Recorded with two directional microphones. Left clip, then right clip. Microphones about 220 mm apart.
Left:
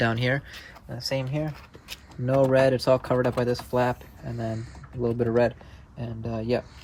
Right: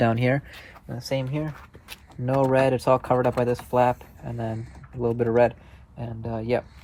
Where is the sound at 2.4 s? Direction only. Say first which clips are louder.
Left 1 dB; 20° right (ahead or behind).